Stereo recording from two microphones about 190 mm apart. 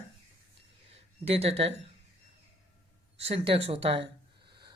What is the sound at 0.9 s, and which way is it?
Speech, 30° right (ahead or behind).